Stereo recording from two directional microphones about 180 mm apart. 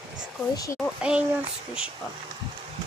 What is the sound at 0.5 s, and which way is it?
Speech, 15° left (ahead or behind).